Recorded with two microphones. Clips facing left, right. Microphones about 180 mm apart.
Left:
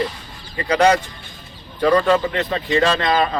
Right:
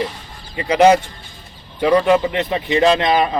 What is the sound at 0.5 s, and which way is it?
Speech, 25° right (ahead or behind).